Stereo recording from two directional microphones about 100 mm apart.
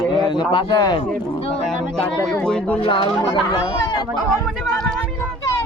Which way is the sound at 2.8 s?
60° left (ahead or behind).